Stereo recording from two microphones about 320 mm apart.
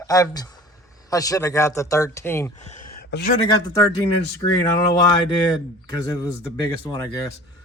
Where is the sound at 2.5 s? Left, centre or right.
Left.